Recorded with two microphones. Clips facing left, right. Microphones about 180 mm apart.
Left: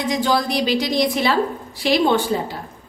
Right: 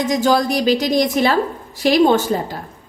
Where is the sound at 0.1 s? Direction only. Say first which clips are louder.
Right 3 dB; 45° right (ahead or behind).